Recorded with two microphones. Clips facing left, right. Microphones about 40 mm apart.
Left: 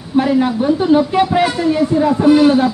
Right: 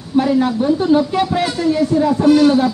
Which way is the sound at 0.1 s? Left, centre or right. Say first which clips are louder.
Left 1 dB; centre.